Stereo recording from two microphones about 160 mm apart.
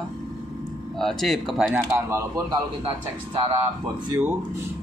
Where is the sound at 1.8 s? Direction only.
15° right (ahead or behind).